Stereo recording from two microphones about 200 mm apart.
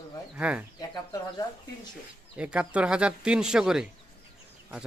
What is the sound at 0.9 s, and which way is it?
Speech, 20° left (ahead or behind).